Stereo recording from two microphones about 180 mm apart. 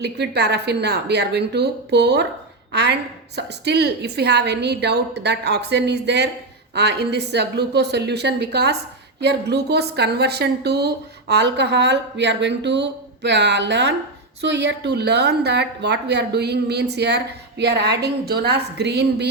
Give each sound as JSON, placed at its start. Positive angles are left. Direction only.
{"t": 0.0, "sound": "a woman's voice", "side_deg": -65}